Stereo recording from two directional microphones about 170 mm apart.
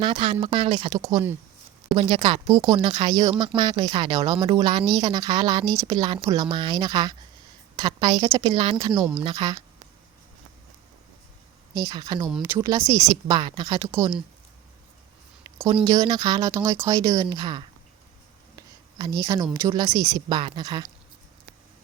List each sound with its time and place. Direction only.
0.0 s a woman's voice: 30° right (ahead or behind)
2.5 s a woman's voice: 20° right (ahead or behind)
11.7 s speech: 25° right (ahead or behind)
15.4 s a sound: 20° right (ahead or behind)
15.8 s speech: 20° right (ahead or behind)
18.5 s a sound: 20° right (ahead or behind)
19.5 s speech: 20° right (ahead or behind)